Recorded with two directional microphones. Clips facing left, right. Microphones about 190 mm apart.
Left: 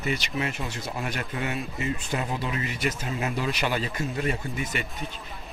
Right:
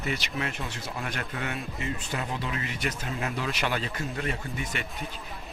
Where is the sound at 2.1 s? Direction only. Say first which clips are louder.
Left 3 dB; 20° left (ahead or behind).